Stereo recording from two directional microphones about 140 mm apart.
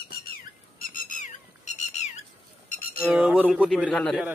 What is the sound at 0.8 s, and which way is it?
Squawk, 75° left (ahead or behind).